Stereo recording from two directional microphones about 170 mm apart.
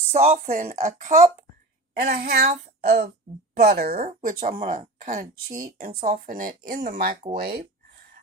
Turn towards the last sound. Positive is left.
turn(degrees=-70)  # may be behind; listen again after turning